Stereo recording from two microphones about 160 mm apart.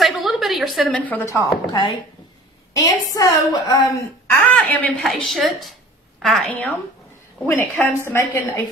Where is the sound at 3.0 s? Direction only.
25° left (ahead or behind).